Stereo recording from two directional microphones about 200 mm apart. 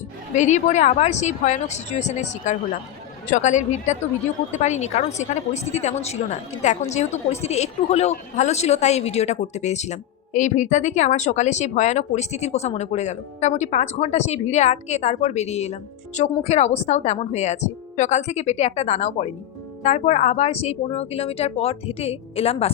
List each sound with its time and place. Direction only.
0.3 s speech: 35° left (ahead or behind)